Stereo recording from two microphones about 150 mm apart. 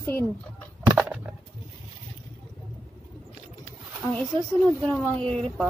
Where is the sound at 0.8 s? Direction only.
15° right (ahead or behind).